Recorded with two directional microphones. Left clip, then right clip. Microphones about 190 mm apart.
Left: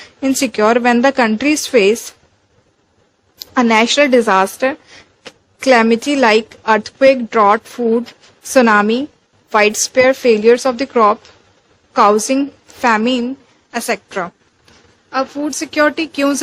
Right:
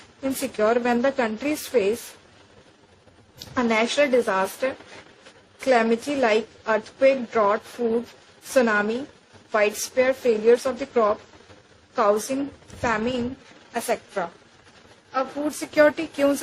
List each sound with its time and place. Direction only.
0.2 s a woman's voice: 50° left (ahead or behind)
3.3 s a woman's voice: 45° left (ahead or behind)